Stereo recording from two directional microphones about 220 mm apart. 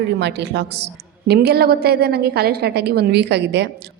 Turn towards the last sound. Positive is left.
turn(degrees=-50)  # may be behind; listen again after turning